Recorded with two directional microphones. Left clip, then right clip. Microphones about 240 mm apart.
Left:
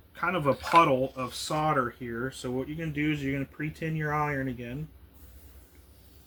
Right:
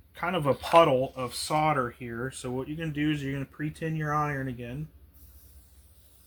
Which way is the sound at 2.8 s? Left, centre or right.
Centre.